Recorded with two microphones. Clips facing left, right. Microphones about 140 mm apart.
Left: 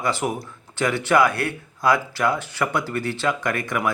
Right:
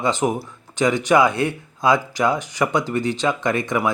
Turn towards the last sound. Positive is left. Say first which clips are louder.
# right 3 dB
turn(degrees=-20)  # may be behind; listen again after turning